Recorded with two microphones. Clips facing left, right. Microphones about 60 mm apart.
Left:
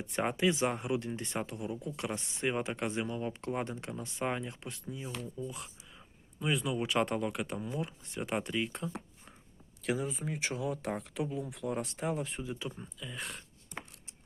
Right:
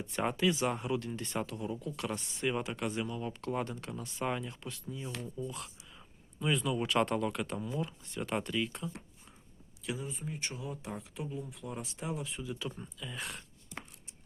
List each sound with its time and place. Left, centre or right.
0.1 s speech: left
5.6 s a sound: centre
7.1 s speech: centre; by 9.3 s left
9.8 s speech: left
12.4 s speech: left
12.6 s speech: centre
13.0 s speech: centre